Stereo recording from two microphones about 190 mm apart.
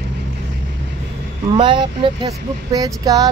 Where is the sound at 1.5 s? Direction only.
25° right (ahead or behind).